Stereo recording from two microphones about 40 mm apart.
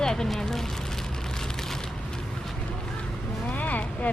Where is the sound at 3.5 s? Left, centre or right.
Left.